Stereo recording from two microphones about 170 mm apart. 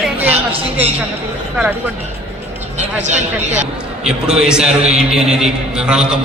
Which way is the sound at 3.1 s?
40° right (ahead or behind).